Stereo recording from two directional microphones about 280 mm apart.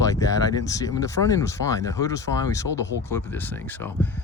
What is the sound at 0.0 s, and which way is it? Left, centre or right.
Speech, centre.